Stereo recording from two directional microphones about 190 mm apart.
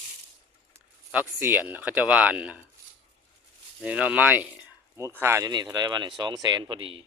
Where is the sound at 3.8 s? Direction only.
5° right (ahead or behind).